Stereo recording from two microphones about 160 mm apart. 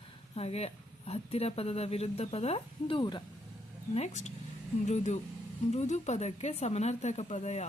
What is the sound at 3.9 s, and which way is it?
Speech, 45° left (ahead or behind).